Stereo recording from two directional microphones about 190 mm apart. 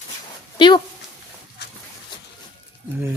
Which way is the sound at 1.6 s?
60° left (ahead or behind).